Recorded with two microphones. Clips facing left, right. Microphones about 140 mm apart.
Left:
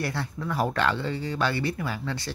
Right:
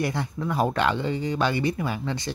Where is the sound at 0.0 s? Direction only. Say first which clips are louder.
Right 3 dB; 15° right (ahead or behind).